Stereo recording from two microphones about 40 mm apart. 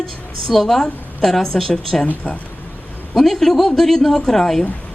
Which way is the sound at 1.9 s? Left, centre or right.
Centre.